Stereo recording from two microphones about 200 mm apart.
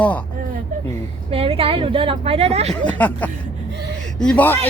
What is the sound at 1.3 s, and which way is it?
Speech, 30° right (ahead or behind).